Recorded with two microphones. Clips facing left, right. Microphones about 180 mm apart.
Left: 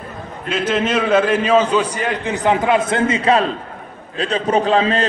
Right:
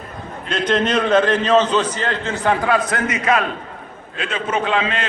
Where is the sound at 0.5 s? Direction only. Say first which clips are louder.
Even; 5° left (ahead or behind).